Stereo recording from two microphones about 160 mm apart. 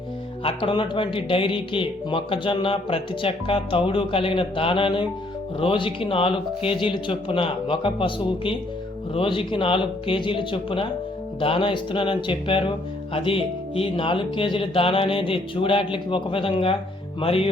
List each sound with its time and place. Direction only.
0.4 s a man's voice: 30° left (ahead or behind)